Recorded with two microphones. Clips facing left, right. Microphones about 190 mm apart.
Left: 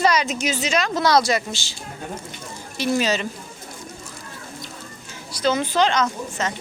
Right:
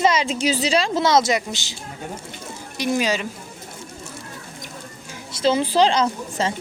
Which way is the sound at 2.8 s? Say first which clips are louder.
Even; 10° right (ahead or behind).